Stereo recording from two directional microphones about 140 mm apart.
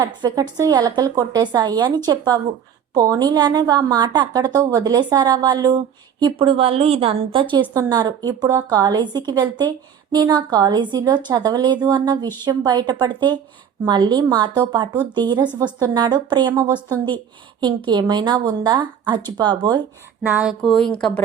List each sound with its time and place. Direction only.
0.0 s a woman's voice: 30° right (ahead or behind)
7.7 s a woman's voice: 25° right (ahead or behind)
17.6 s speech: 35° right (ahead or behind)
20.2 s speech: 10° right (ahead or behind)
20.6 s speech: 5° left (ahead or behind)